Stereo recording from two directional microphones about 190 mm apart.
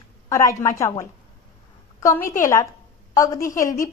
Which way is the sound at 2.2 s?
45° left (ahead or behind).